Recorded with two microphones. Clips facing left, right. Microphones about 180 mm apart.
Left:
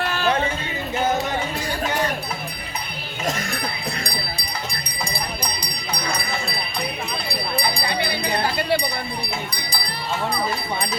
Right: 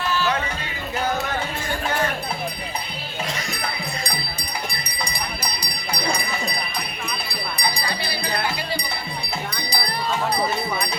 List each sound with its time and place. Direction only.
0.0 s music: 55° left (ahead or behind)
0.3 s speech: 30° left (ahead or behind)
7.9 s a sound: 20° left (ahead or behind)